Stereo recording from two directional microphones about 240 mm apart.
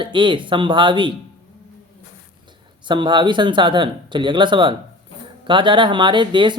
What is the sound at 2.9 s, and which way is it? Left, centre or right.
Speech, centre.